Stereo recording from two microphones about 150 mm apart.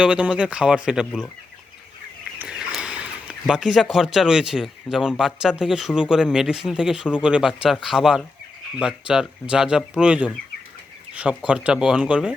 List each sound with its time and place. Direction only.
0.0 s speech: 5° right (ahead or behind)
2.4 s speech: 5° right (ahead or behind)